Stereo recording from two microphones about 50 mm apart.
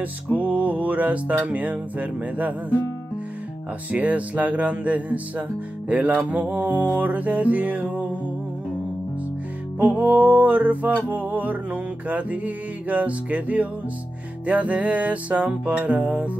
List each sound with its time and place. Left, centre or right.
0.5 s music: right
3.9 s music: right
9.8 s music: right